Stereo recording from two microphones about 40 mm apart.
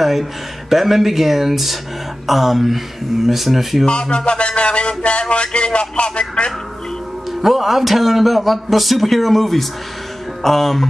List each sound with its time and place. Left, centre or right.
0.0 s a man's voice: centre
3.8 s a sound: left
7.4 s a man's voice: centre